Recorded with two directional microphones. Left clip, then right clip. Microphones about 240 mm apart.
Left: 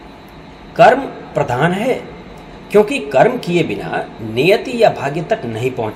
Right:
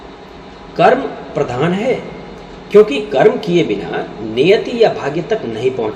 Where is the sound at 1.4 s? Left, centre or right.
Left.